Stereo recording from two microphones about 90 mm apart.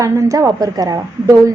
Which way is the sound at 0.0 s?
35° right (ahead or behind).